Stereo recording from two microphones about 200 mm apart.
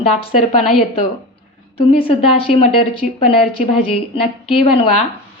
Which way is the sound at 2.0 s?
30° left (ahead or behind).